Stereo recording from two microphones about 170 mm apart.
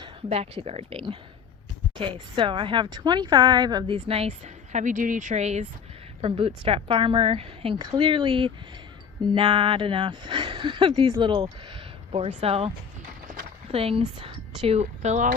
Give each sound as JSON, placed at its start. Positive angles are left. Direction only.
{"t": 0.0, "sound": "speech", "side_deg": -35}
{"t": 2.3, "sound": "speech", "side_deg": -30}
{"t": 11.7, "sound": "a sound", "side_deg": -35}
{"t": 12.4, "sound": "speech", "side_deg": -35}
{"t": 13.1, "sound": "a sound", "side_deg": -50}
{"t": 13.7, "sound": "speech", "side_deg": -35}